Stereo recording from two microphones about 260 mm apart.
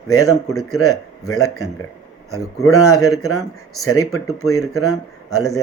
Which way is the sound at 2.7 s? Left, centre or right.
Left.